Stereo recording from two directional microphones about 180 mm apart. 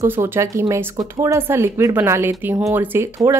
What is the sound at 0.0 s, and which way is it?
Speech, 15° right (ahead or behind).